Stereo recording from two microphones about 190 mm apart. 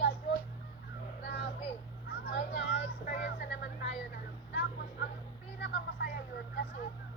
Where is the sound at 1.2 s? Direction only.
60° left (ahead or behind).